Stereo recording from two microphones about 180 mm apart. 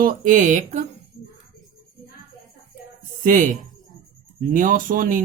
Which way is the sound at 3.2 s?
45° right (ahead or behind).